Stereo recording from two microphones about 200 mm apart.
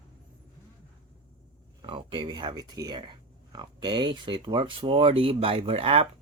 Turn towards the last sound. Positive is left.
turn(degrees=-30)  # may be behind; listen again after turning